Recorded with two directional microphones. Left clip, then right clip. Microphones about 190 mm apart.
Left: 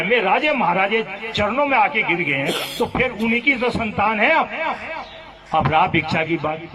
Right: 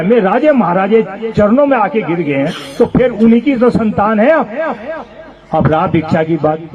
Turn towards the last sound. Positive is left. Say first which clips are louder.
# right 8 dB
turn(degrees=-55)  # may be behind; listen again after turning